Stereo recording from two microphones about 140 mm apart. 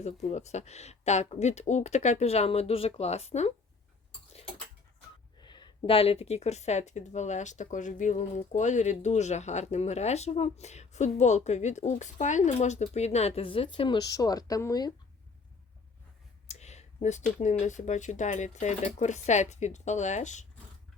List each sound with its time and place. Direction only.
0.0 s speech: 55° left (ahead or behind)
5.4 s speech: 30° left (ahead or behind)
16.5 s a sound: 50° left (ahead or behind)
17.4 s speech: 55° left (ahead or behind)